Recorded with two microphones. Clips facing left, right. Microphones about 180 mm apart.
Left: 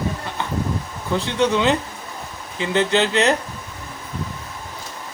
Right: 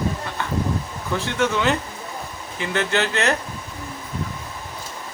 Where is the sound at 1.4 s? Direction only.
20° left (ahead or behind).